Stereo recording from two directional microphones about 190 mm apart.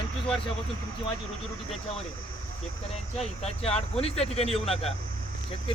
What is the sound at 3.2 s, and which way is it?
Speech, 30° left (ahead or behind).